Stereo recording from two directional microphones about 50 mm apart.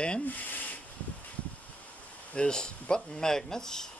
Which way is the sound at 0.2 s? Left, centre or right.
Left.